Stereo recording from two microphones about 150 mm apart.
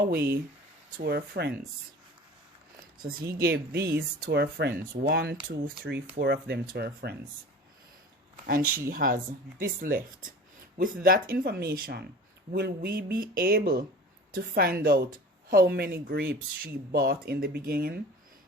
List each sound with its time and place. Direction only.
0.0 s speech: 80° right
3.0 s speech: 90° right
8.4 s speech: 70° right (ahead or behind)
10.8 s speech: 90° right